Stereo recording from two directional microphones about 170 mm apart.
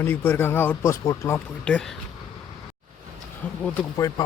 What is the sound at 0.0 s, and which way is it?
Speech, 10° left (ahead or behind).